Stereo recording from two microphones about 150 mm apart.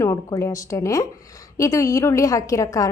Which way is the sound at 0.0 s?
20° left (ahead or behind).